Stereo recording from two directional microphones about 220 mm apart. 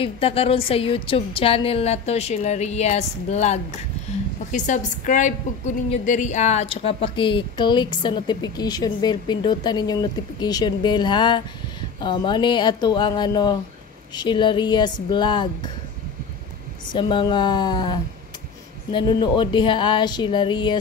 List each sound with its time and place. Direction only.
0.0 s a woman's voice: 25° left (ahead or behind)
16.9 s speech: 20° left (ahead or behind)